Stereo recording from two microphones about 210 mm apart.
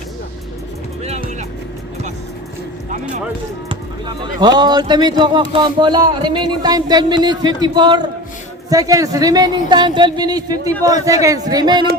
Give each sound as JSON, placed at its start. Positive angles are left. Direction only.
{"t": 1.0, "sound": "music", "side_deg": -30}
{"t": 3.7, "sound": "a man's voice", "side_deg": -25}